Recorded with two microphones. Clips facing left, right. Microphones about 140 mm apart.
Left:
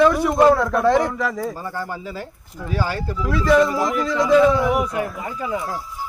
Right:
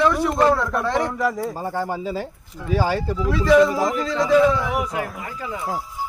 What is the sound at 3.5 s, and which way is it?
Speech, centre (ahead or behind).